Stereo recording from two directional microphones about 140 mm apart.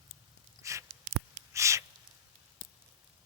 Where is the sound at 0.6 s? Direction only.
20° right (ahead or behind).